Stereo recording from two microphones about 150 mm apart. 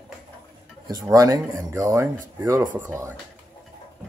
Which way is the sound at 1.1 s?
20° right (ahead or behind).